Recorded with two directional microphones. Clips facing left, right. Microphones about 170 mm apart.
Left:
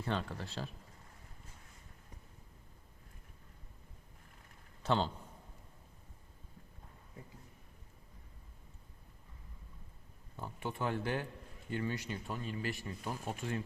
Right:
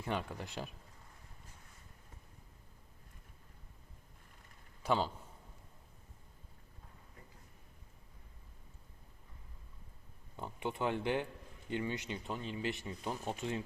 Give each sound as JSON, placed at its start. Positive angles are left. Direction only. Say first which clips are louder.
{"t": 0.0, "sound": "speech", "louder": "left 1 dB", "side_deg": -15}
{"t": 4.8, "sound": "a man's voice", "louder": "even", "side_deg": -5}
{"t": 10.3, "sound": "speech", "louder": "right 2 dB", "side_deg": -20}